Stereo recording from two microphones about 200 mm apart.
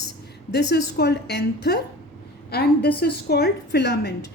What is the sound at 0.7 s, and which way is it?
A woman's voice, 55° left (ahead or behind).